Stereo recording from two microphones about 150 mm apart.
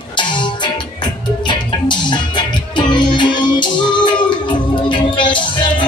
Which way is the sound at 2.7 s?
30° left (ahead or behind).